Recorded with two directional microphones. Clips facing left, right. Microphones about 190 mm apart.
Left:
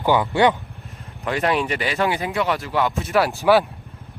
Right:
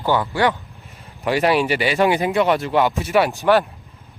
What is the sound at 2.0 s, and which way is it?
Speech, 20° right (ahead or behind).